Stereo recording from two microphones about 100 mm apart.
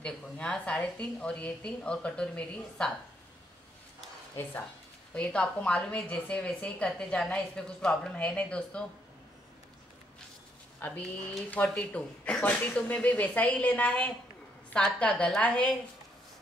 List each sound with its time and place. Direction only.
0.0 s a woman's voice: 10° left (ahead or behind)
5.1 s a woman's voice: 10° left (ahead or behind)
10.8 s a woman's voice: 20° left (ahead or behind)